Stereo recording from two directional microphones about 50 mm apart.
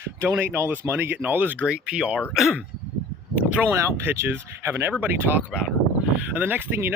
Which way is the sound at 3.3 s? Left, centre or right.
Right.